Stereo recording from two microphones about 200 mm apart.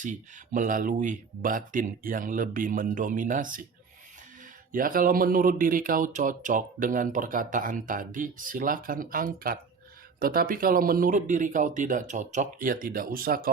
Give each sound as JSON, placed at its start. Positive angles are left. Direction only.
{"t": 0.0, "sound": "speech", "side_deg": -40}
{"t": 4.7, "sound": "speech", "side_deg": -45}